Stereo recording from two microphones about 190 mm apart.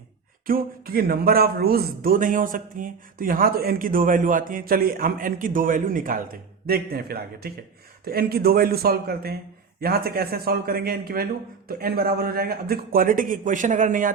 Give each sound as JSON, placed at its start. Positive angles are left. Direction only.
{"t": 0.4, "sound": "a man's voice", "side_deg": -50}